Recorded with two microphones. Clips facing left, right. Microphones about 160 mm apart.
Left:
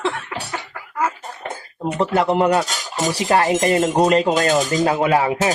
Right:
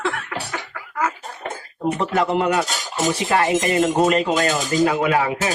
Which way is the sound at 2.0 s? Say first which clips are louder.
Left 4 dB; 35° left (ahead or behind).